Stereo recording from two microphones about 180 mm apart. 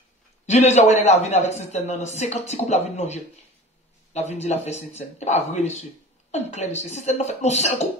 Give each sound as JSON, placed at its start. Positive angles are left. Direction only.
{"t": 0.5, "sound": "a man's voice", "side_deg": 40}